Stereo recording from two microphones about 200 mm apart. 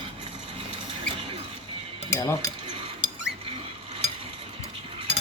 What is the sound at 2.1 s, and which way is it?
Speech, 15° left (ahead or behind).